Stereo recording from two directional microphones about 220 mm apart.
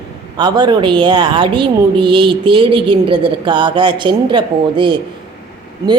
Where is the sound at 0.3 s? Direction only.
20° right (ahead or behind).